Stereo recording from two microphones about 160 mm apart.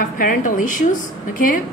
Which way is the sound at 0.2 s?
55° left (ahead or behind).